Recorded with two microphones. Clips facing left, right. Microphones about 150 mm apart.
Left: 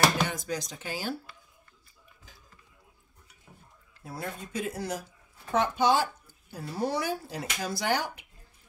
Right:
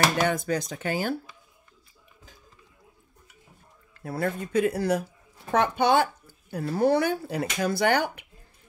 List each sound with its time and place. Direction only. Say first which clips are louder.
0.2 s speech: right 6 dB; 55° right (ahead or behind)
4.0 s speech: right 9 dB; 60° right (ahead or behind)